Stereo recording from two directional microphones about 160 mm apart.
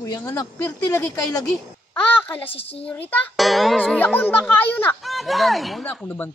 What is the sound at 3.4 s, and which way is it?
Speech, centre (ahead or behind).